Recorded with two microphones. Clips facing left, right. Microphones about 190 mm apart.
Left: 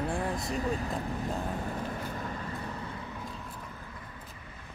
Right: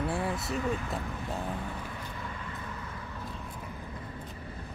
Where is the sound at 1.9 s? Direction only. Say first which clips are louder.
Left 4 dB; 40° left (ahead or behind).